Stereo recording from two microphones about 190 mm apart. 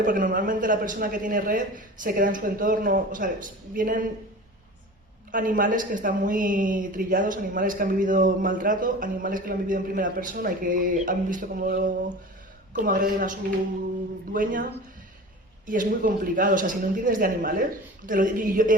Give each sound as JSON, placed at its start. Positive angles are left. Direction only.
{"t": 0.0, "sound": "a man's voice", "side_deg": -45}
{"t": 5.3, "sound": "a man's voice", "side_deg": -45}